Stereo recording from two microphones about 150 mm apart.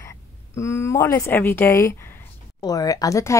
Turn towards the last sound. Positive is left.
turn(degrees=20)  # may be behind; listen again after turning